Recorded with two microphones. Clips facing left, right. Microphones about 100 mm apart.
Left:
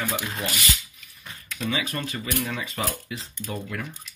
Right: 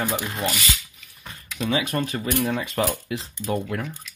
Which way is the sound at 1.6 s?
35° right (ahead or behind).